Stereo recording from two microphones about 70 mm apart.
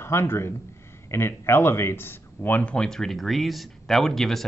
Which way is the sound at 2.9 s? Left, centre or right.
Centre.